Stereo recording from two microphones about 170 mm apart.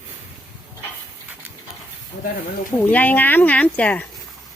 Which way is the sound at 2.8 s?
10° left (ahead or behind).